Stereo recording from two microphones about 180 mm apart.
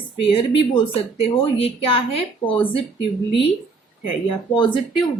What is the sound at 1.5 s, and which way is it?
Speech, 30° left (ahead or behind).